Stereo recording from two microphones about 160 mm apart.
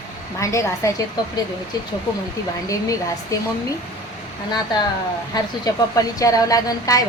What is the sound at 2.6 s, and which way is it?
Speech, 20° left (ahead or behind).